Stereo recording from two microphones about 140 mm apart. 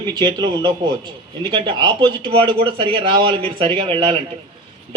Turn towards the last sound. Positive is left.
turn(degrees=-40)  # may be behind; listen again after turning